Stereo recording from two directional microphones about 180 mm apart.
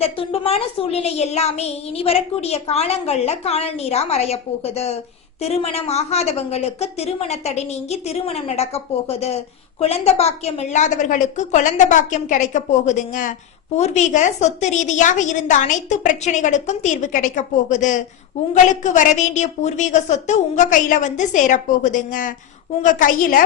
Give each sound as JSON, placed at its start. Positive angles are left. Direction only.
{"t": 0.2, "sound": "a woman's voice", "side_deg": 35}